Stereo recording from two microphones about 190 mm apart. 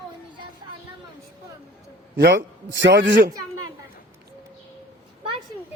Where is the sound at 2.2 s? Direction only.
70° right (ahead or behind).